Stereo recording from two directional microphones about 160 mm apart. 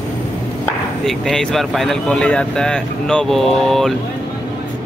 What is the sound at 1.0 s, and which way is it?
Speech, centre (ahead or behind).